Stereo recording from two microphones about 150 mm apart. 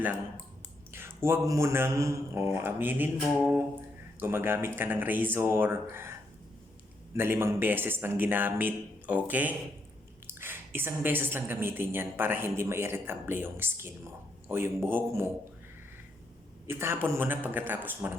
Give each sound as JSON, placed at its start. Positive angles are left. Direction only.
{"t": 0.9, "sound": "a woman's voice", "side_deg": -15}
{"t": 16.6, "sound": "a woman's voice", "side_deg": -15}